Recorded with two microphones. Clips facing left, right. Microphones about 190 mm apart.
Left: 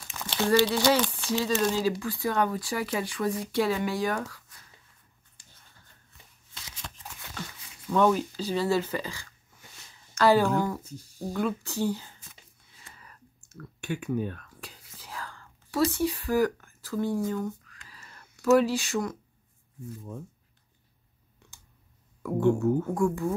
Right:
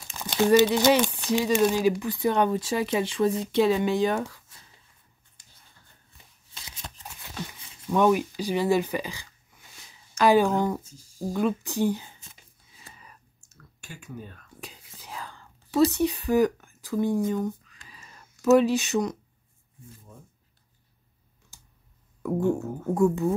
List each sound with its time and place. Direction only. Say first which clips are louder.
0.2 s speech: right 4 dB; 15° right (ahead or behind)
5.4 s a sound: left 3 dB; 30° left (ahead or behind)
6.8 s a sound: right 1 dB; 30° right (ahead or behind)
7.9 s speech: right 2 dB; 15° right (ahead or behind)
10.9 s speech: left 9 dB; 65° left (ahead or behind)
11.3 s speech: right 3 dB; 20° right (ahead or behind)
12.9 s whispering: left 1 dB; 20° right (ahead or behind)
13.4 s clicking: left 11 dB; 65° left (ahead or behind)
14.6 s whispering: right 3 dB; 20° right (ahead or behind)
17.8 s a sound: right 2 dB; 15° right (ahead or behind)
18.4 s speech: right 3 dB; 20° right (ahead or behind)
21.4 s clicking: left 2 dB; 65° left (ahead or behind)
22.9 s speech: right 4 dB; 20° right (ahead or behind)